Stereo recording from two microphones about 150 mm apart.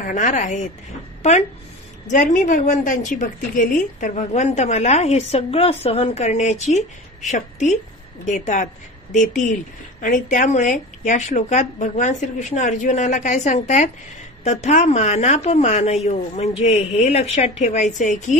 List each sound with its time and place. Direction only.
0.0 s speech: 60° left (ahead or behind)
2.0 s a woman's voice: 60° left (ahead or behind)